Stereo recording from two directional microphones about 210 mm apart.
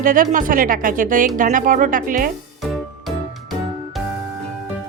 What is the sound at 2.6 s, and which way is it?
Music, centre (ahead or behind).